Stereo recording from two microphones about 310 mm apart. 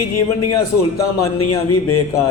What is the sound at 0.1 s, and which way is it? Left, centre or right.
A man's voice, left.